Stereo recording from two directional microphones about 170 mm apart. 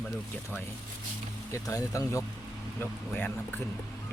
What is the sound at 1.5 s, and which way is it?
Speech, 20° left (ahead or behind).